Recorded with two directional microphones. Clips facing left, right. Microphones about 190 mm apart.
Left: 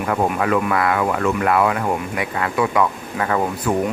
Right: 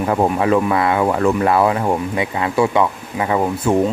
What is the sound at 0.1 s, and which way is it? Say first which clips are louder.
Speech: right 3 dB; 25° right (ahead or behind).